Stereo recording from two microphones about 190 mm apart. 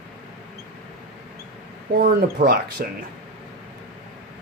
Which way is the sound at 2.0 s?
55° right (ahead or behind).